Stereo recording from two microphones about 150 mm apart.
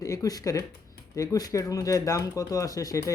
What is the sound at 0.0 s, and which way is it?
Speech, 25° left (ahead or behind).